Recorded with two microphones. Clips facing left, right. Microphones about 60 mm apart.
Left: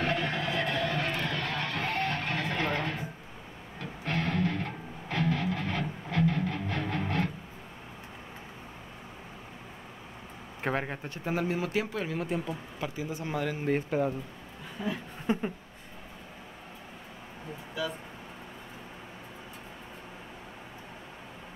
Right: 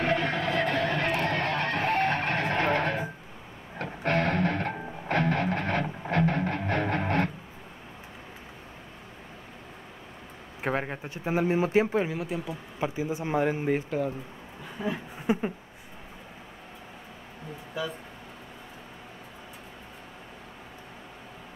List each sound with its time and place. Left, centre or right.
0.0 s music: right
10.6 s speech: centre; by 12.1 s right
12.1 s speech: centre
12.8 s speech: right
13.8 s speech: centre
14.8 s speech: centre